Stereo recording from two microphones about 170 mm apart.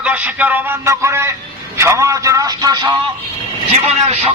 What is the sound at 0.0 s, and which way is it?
A man's voice, 10° right (ahead or behind).